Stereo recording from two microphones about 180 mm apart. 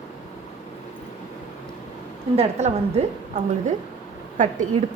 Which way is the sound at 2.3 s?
35° right (ahead or behind).